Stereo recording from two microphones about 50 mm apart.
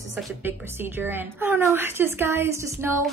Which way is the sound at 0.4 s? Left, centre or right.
Right.